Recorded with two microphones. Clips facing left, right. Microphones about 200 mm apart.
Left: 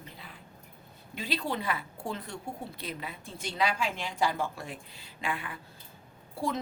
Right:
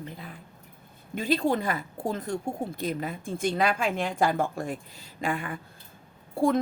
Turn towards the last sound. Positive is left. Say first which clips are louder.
# right 9 dB
turn(degrees=-50)  # may be behind; listen again after turning